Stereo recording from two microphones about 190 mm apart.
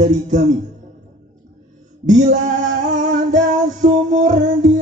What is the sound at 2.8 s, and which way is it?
Music, 40° right (ahead or behind).